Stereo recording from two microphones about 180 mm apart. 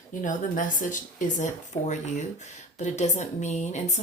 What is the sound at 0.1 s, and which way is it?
Speech, 45° left (ahead or behind).